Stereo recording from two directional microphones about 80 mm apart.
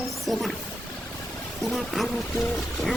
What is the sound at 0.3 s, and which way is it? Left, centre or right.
Speech, centre.